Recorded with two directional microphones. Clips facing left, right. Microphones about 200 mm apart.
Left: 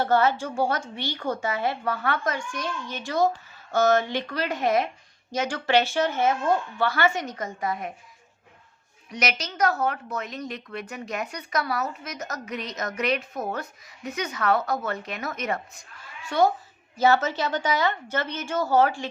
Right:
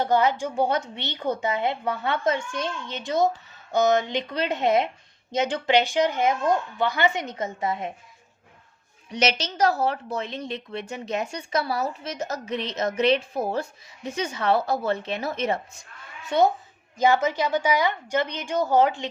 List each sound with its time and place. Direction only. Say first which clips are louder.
0.0 s a woman's voice: even; 15° right (ahead or behind)
9.0 s a woman's voice: right 4 dB; 30° right (ahead or behind)